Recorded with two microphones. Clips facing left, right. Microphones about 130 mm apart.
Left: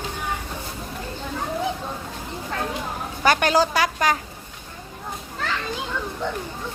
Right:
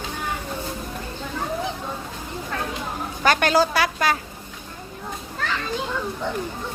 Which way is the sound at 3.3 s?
15° left (ahead or behind).